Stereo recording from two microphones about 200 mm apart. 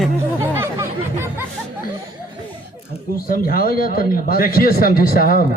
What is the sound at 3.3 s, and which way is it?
Speech, 45° left (ahead or behind).